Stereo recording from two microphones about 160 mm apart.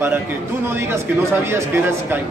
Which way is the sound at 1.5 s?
15° right (ahead or behind).